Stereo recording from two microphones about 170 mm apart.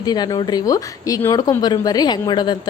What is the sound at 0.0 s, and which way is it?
A woman's voice, 25° left (ahead or behind).